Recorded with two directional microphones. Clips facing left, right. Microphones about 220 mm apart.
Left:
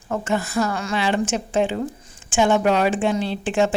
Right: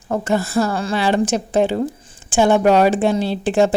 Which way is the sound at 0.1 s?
35° right (ahead or behind).